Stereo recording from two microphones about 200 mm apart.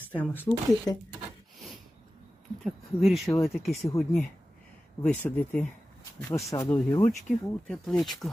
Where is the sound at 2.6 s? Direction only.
Centre (ahead or behind).